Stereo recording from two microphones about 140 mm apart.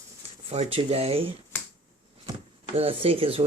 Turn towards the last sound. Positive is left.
turn(degrees=-40)  # may be behind; listen again after turning